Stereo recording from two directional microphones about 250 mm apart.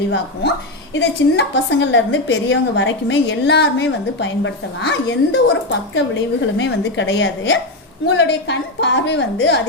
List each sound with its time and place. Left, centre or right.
0.9 s a woman's voice: left